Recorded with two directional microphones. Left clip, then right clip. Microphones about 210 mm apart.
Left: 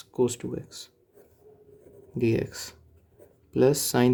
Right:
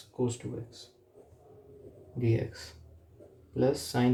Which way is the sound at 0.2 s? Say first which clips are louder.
Left 7 dB; 55° left (ahead or behind).